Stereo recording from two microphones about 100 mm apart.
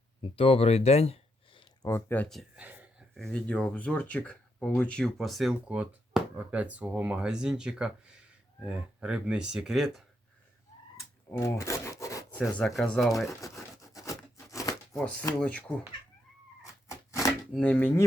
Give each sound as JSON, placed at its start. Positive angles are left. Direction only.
{"t": 0.2, "sound": "speech", "side_deg": 65}
{"t": 1.8, "sound": "speech", "side_deg": 25}
{"t": 2.6, "sound": "a sound", "side_deg": -15}
{"t": 3.2, "sound": "speech", "side_deg": 5}
{"t": 5.6, "sound": "speech", "side_deg": -10}
{"t": 6.1, "sound": "a sound", "side_deg": -5}
{"t": 6.5, "sound": "speech", "side_deg": -15}
{"t": 11.3, "sound": "a sound", "side_deg": 30}
{"t": 12.3, "sound": "speech", "side_deg": 15}
{"t": 13.2, "sound": "a sound", "side_deg": 35}
{"t": 15.4, "sound": "speech", "side_deg": 15}
{"t": 16.6, "sound": "cat", "side_deg": 30}
{"t": 17.6, "sound": "speech", "side_deg": 15}